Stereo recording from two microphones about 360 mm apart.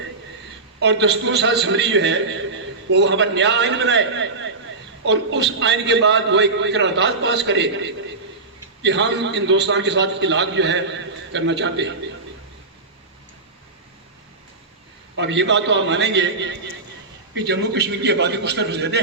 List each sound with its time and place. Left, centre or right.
0.8 s a man's voice: right
15.1 s a man's voice: right